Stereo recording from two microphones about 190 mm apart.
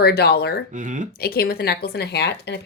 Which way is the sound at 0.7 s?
40° right (ahead or behind).